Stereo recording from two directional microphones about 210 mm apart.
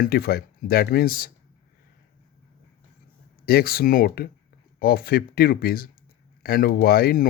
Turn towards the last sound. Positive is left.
turn(degrees=45)  # may be behind; listen again after turning